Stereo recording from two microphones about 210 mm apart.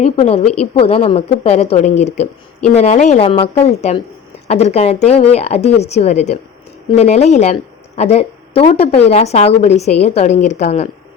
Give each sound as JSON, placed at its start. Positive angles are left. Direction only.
{"t": 0.0, "sound": "speech", "side_deg": 30}